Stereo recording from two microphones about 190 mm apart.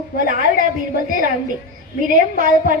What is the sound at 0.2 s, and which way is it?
A woman's voice, 45° right (ahead or behind).